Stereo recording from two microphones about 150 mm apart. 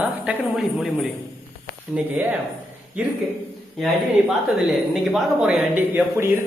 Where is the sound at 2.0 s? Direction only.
10° right (ahead or behind).